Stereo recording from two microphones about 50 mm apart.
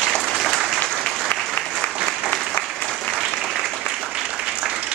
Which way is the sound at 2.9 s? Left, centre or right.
Centre.